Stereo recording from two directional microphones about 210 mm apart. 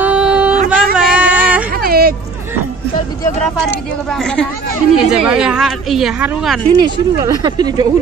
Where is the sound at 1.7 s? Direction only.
45° right (ahead or behind).